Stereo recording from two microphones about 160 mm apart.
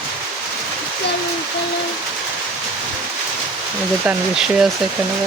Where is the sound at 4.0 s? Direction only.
5° right (ahead or behind).